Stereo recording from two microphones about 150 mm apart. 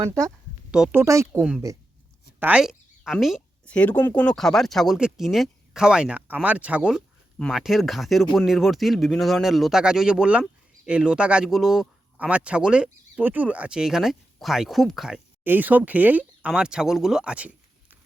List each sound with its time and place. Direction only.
0.0 s speech: 20° right (ahead or behind)
0.7 s speech: 5° right (ahead or behind)
0.9 s speech: 20° right (ahead or behind)
1.4 s speech: 5° right (ahead or behind)
3.7 s speech: 10° left (ahead or behind); by 17.5 s 5° right (ahead or behind)